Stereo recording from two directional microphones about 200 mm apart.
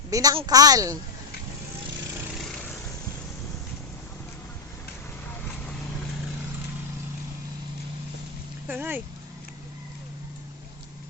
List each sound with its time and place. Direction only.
0.1 s a woman's voice: 20° right (ahead or behind)
8.6 s speech: 10° right (ahead or behind)